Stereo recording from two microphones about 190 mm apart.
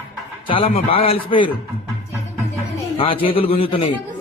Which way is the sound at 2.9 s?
30° left (ahead or behind).